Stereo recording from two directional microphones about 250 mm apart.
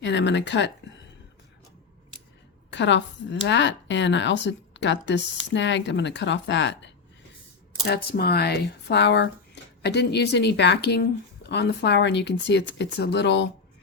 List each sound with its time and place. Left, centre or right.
0.0 s a woman's voice: left
2.6 s a sound: left
3.4 s a woman's voice: left
7.9 s a woman's voice: left